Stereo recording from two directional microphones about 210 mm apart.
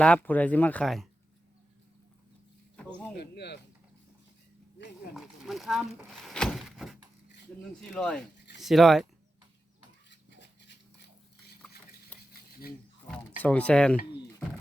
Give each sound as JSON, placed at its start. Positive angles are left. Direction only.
{"t": 0.0, "sound": "speech", "side_deg": 5}
{"t": 3.2, "sound": "speech", "side_deg": 50}
{"t": 5.1, "sound": "a sound", "side_deg": 0}
{"t": 7.8, "sound": "speech", "side_deg": 5}
{"t": 10.1, "sound": "a sound", "side_deg": 55}
{"t": 13.4, "sound": "speech", "side_deg": 5}